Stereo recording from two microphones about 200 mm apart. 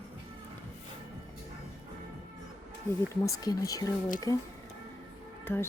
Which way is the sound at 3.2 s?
15° left (ahead or behind).